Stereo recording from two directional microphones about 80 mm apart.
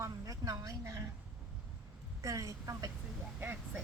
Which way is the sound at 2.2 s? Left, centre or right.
Right.